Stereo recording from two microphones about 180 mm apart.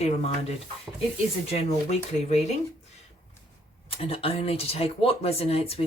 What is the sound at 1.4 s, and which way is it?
Speech, 40° left (ahead or behind).